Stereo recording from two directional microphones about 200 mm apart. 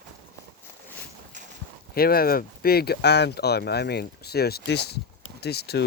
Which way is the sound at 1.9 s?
50° left (ahead or behind).